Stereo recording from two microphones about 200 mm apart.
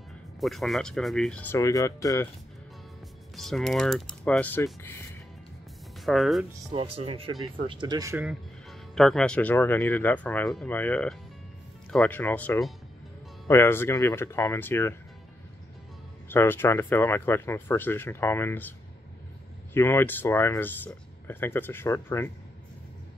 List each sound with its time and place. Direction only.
0.4 s speech: centre (ahead or behind); by 2.2 s 15° left (ahead or behind)
3.3 s speech: centre (ahead or behind)
5.9 s speech: centre (ahead or behind)
6.7 s speech: 25° right (ahead or behind)
8.3 s speech: centre (ahead or behind)
16.3 s speech: 10° left (ahead or behind)